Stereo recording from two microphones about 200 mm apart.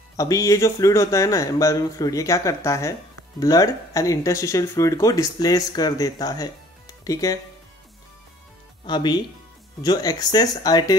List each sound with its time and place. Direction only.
0.2 s speech: 15° left (ahead or behind)
8.8 s speech: 20° left (ahead or behind)